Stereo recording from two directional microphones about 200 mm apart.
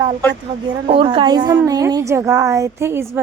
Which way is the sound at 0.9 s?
25° right (ahead or behind).